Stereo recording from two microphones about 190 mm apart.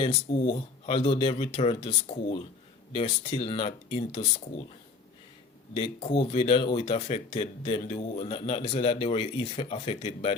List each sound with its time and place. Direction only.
0.0 s speech: 30° left (ahead or behind)
5.7 s speech: 25° left (ahead or behind)